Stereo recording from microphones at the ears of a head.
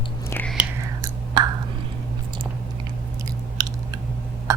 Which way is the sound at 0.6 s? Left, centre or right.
Right.